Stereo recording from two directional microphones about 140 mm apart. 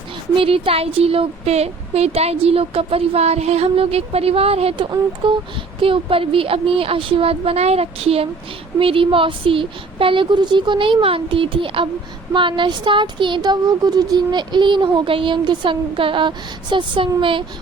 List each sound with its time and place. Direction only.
0.3 s speech: 40° right (ahead or behind)